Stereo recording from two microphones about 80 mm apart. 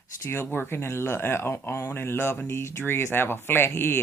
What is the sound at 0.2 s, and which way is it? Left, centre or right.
Speech, left.